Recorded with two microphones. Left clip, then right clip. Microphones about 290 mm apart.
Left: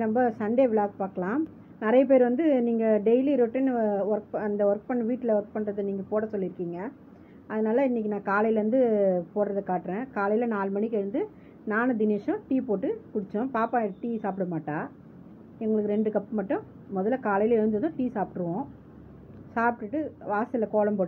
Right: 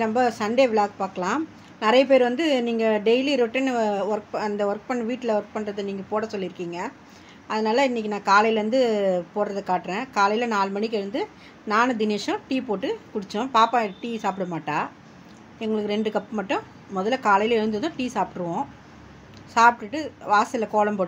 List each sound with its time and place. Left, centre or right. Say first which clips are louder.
0.0 s a woman's voice: right 4 dB; centre